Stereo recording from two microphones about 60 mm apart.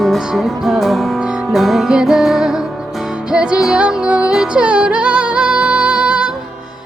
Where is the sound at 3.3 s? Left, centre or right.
Centre.